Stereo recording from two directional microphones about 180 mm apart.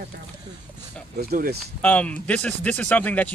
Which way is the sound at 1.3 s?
50° right (ahead or behind).